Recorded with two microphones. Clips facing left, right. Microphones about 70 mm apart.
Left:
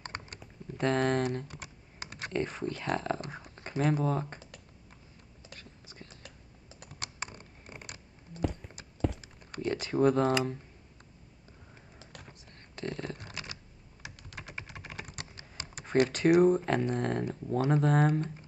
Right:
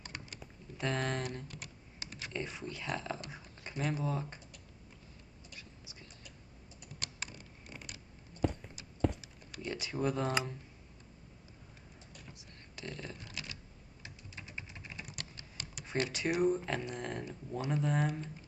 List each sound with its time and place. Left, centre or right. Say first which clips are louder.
0.0 s typing: left 5 dB; left
0.7 s speech: left 8 dB; left
5.6 s whispering: left 2 dB; left
7.0 s typing: left 4 dB; left
9.2 s typing: left 8 dB; left
12.4 s computer keyboard: left 7 dB; left
14.0 s typing: left 5 dB; left
15.0 s typing: left 2 dB; left
16.1 s speech: left 8 dB; left